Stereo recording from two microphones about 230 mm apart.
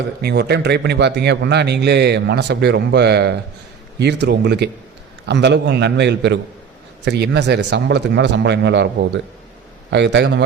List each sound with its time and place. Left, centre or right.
0.2 s a man's voice: right
9.9 s a man's voice: right